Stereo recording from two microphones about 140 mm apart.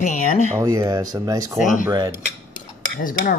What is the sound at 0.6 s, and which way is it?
Speech, 25° right (ahead or behind).